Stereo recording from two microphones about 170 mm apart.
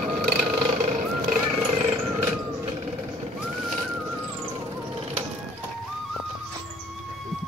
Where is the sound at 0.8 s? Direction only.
45° right (ahead or behind).